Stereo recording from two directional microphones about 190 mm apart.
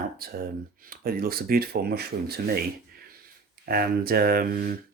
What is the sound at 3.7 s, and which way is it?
Speech, 50° right (ahead or behind).